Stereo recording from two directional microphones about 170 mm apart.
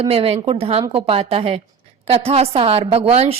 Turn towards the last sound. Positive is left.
turn(degrees=-35)  # may be behind; listen again after turning